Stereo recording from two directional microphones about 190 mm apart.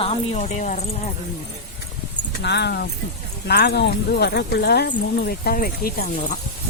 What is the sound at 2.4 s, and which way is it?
Speech, 65° left (ahead or behind).